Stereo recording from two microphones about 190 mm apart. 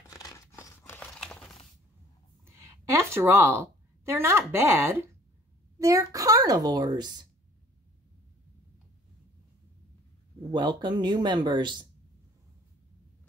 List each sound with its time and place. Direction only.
0.1 s crumpling: 15° left (ahead or behind)
2.4 s a sound: 15° right (ahead or behind)
4.0 s a woman's voice: 15° right (ahead or behind)
10.5 s speech: 25° right (ahead or behind)